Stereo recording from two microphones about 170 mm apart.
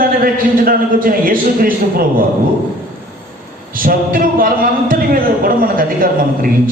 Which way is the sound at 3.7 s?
55° right (ahead or behind).